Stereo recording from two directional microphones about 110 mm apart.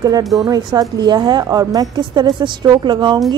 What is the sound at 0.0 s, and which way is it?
A woman's voice, 35° right (ahead or behind).